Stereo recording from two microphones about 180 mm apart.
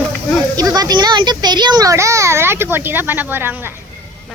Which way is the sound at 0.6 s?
20° right (ahead or behind).